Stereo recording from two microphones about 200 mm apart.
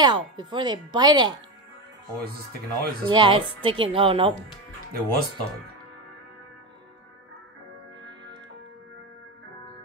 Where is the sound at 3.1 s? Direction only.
25° right (ahead or behind).